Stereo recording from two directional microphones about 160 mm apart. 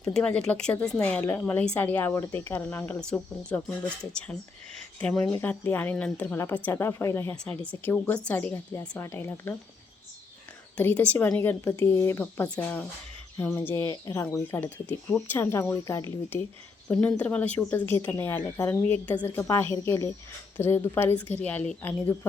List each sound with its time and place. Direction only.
0.0 s a woman's voice: 5° left (ahead or behind)
10.8 s a woman's voice: 10° left (ahead or behind)
16.9 s a woman's voice: 10° left (ahead or behind)